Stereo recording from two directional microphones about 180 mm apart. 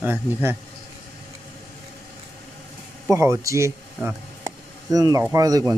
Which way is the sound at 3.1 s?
15° right (ahead or behind).